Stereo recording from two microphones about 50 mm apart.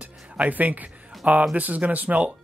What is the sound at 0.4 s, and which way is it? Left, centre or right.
Speech, right.